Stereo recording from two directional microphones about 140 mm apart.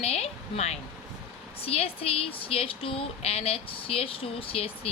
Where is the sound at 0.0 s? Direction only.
45° left (ahead or behind).